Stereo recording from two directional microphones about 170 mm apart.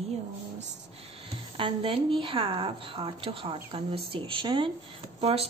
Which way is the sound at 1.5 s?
30° right (ahead or behind).